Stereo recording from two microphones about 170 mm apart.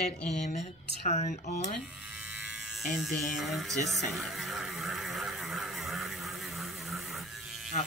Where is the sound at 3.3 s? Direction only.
Centre (ahead or behind).